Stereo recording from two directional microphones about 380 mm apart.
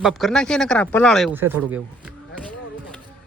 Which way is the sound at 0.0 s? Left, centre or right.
Centre.